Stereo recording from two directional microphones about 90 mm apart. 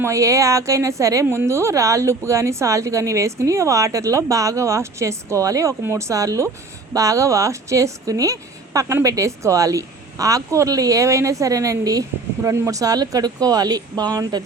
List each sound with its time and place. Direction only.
0.0 s a woman's voice: 35° right (ahead or behind)